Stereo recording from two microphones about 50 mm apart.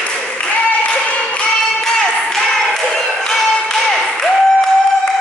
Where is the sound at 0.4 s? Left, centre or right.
Left.